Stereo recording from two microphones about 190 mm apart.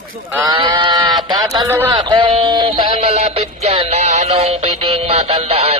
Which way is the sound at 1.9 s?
25° right (ahead or behind).